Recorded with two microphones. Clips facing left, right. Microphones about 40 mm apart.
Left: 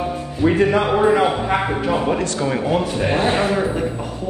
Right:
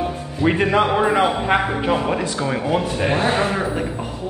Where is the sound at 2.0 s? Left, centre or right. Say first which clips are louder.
Left 2 dB; centre.